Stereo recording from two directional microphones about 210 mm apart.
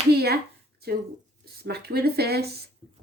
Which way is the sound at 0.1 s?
50° right (ahead or behind).